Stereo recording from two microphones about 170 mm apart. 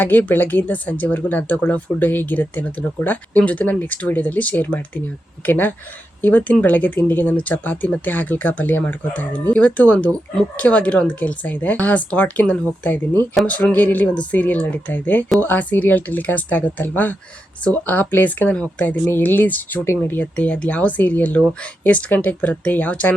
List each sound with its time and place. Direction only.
0.0 s speech: 10° left (ahead or behind)